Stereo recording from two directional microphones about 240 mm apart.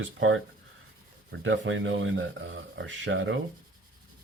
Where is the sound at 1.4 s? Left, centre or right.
Right.